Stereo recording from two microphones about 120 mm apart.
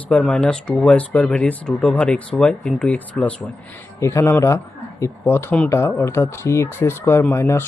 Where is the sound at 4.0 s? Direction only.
25° left (ahead or behind).